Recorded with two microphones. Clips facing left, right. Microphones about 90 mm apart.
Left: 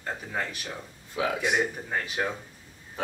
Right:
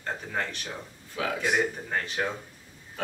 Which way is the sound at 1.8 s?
5° left (ahead or behind).